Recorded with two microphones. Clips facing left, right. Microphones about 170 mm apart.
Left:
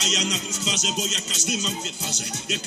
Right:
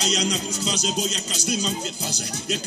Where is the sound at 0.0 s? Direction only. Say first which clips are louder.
Right 3 dB; 35° right (ahead or behind).